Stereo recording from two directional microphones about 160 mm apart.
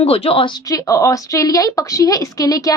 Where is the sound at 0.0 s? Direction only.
40° left (ahead or behind).